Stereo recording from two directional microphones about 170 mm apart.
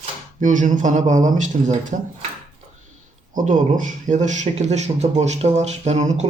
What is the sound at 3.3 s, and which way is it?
Speech, 50° right (ahead or behind).